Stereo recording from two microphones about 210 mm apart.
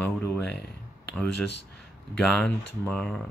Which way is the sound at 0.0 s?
10° left (ahead or behind).